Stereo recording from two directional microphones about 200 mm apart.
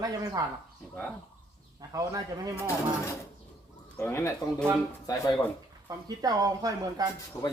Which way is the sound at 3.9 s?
15° left (ahead or behind).